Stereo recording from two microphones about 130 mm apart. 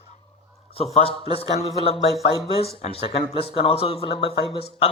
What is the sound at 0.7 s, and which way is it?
Speech, 50° left (ahead or behind).